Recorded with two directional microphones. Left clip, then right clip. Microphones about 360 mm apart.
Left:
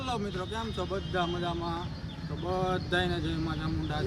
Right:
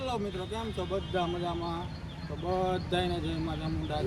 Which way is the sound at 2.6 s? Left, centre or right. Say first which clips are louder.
Left 2 dB; centre.